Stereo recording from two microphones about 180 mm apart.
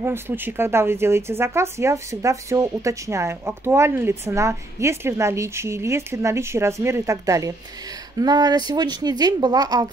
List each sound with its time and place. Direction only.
0.0 s speech: 10° right (ahead or behind)